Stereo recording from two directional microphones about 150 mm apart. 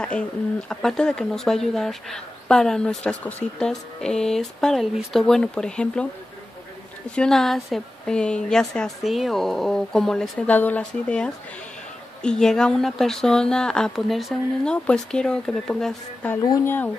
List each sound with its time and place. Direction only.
0.7 s speech: 5° left (ahead or behind)
7.2 s speech: 5° left (ahead or behind)
16.4 s speech: 25° left (ahead or behind)